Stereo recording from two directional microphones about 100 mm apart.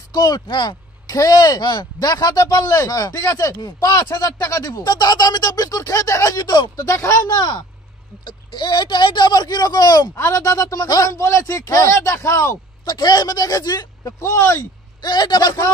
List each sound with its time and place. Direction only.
0.1 s speech: 40° left (ahead or behind)
6.9 s speech: 30° left (ahead or behind)
7.3 s speech: 45° left (ahead or behind); by 12.5 s 30° left (ahead or behind)
12.8 s speech: 45° left (ahead or behind)
15.0 s speech: 45° left (ahead or behind)